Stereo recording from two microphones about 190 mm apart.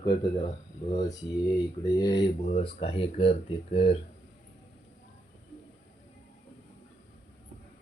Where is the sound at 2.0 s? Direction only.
20° left (ahead or behind).